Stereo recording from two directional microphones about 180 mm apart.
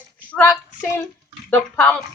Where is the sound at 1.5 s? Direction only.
10° left (ahead or behind).